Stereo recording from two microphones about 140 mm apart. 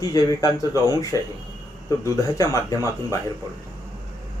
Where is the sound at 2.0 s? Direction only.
25° left (ahead or behind).